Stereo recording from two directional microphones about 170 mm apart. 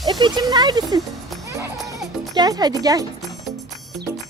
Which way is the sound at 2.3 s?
25° right (ahead or behind).